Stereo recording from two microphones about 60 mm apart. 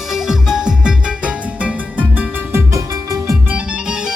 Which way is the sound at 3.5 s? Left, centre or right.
Right.